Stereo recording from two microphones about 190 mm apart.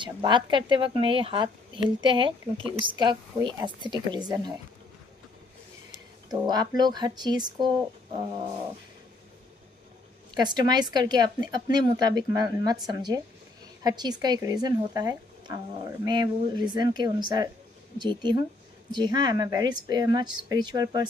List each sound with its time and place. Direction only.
0.0 s speech: 25° right (ahead or behind)
6.4 s speech: 20° right (ahead or behind)
10.3 s speech: 20° right (ahead or behind)